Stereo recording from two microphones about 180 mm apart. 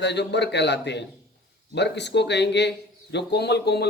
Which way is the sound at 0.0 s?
70° left (ahead or behind).